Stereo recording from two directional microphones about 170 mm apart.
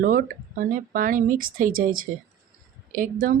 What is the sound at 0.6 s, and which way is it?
Speech, 55° right (ahead or behind).